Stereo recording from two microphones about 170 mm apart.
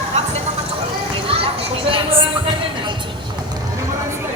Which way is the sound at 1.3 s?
35° right (ahead or behind).